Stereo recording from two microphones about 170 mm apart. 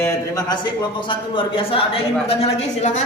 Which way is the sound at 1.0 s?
30° left (ahead or behind).